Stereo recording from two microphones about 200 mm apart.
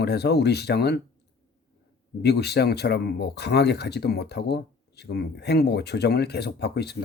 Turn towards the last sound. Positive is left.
turn(degrees=55)  # may be behind; listen again after turning